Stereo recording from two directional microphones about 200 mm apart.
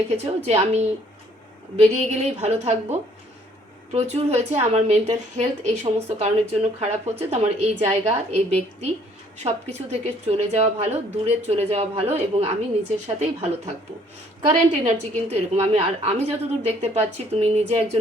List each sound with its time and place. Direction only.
0.4 s speech: 30° right (ahead or behind)